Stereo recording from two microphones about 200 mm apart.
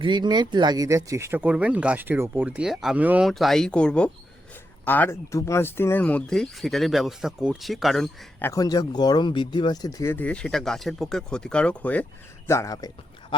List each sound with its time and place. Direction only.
0.0 s speech: 20° right (ahead or behind); by 12.9 s 15° left (ahead or behind)